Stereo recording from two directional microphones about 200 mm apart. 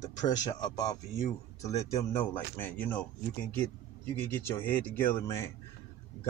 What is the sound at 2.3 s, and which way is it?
Speech, 10° left (ahead or behind).